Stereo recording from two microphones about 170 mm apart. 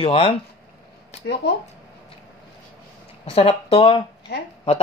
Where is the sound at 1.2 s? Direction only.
85° left.